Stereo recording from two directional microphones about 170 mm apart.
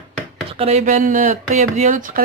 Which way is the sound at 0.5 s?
35° right (ahead or behind).